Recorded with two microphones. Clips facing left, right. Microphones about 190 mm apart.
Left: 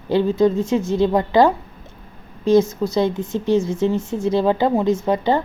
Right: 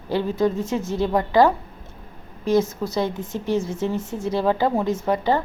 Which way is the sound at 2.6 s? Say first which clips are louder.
Left 5 dB; 5° right (ahead or behind).